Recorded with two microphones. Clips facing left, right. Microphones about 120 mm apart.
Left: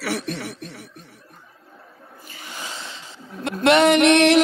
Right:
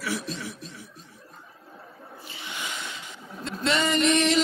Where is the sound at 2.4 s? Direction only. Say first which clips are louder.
Left 1 dB; 35° left (ahead or behind).